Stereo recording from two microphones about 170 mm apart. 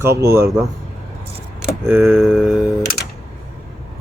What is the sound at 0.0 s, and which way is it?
Speech, 15° right (ahead or behind).